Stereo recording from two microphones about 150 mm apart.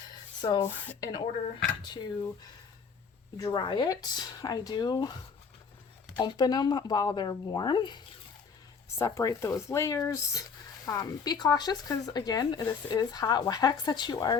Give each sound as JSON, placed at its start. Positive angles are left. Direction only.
{"t": 0.1, "sound": "a sound", "side_deg": 25}
{"t": 0.6, "sound": "speech", "side_deg": 10}
{"t": 1.8, "sound": "speech", "side_deg": 30}
{"t": 3.3, "sound": "speech", "side_deg": 25}
{"t": 6.1, "sound": "speech", "side_deg": 30}